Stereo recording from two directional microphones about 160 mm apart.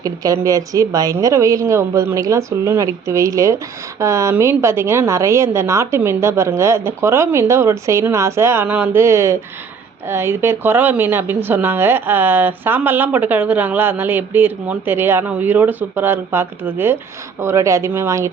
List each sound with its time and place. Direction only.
0.0 s a woman's voice: 20° right (ahead or behind)